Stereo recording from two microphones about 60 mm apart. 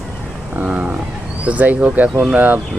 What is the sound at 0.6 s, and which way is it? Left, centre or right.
Wild animals, right.